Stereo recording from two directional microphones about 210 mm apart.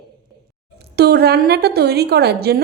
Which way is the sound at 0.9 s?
50° right (ahead or behind).